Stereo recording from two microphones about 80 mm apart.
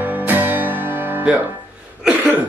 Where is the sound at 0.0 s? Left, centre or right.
Right.